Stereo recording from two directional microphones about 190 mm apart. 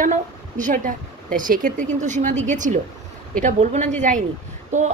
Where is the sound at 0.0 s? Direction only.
45° right (ahead or behind).